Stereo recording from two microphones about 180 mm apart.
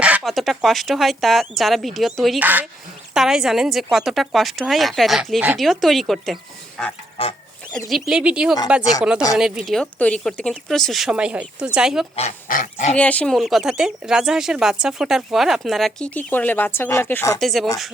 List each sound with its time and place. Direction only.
0.0 s speech: 5° right (ahead or behind)
8.8 s speech: 20° left (ahead or behind)
9.4 s speech: centre (ahead or behind)
12.5 s speech: 45° left (ahead or behind)
13.0 s speech: 5° left (ahead or behind)
17.4 s speech: centre (ahead or behind)